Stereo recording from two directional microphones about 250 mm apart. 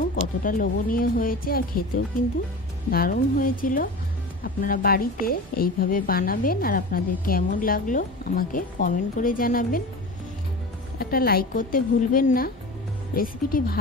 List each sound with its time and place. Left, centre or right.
0.1 s a woman's voice: left
2.9 s a woman's voice: left
11.0 s a woman's voice: left